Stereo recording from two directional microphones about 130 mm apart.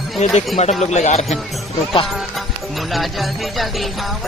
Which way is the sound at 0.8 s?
60° left (ahead or behind).